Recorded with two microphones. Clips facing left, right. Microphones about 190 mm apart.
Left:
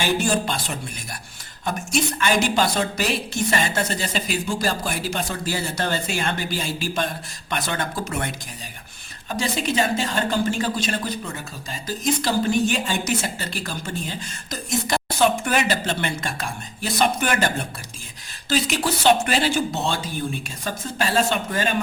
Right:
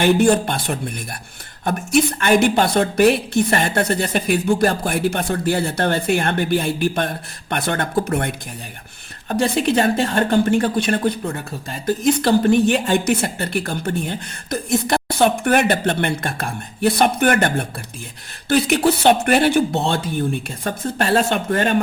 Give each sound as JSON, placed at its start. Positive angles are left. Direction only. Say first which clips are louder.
{"t": 0.0, "sound": "speech", "louder": "right 7 dB", "side_deg": -55}